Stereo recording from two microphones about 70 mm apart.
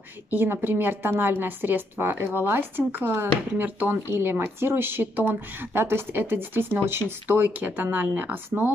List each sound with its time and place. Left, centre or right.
0.3 s a woman's voice: right